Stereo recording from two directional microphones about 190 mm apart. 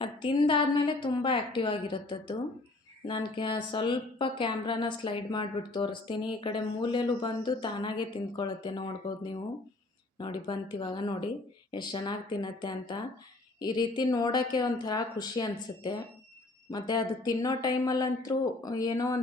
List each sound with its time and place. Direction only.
0.0 s a woman's voice: 25° left (ahead or behind)
16.7 s a woman's voice: 20° left (ahead or behind)